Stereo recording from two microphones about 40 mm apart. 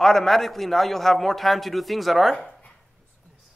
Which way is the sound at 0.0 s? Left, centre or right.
Centre.